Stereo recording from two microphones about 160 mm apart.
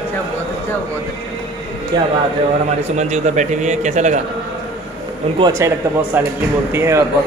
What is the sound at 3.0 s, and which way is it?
A man's voice, 45° right (ahead or behind).